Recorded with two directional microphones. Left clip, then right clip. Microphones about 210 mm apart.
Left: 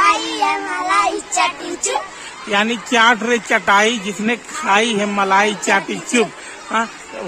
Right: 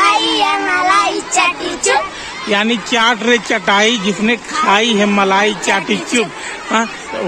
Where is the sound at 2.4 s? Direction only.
5° left (ahead or behind).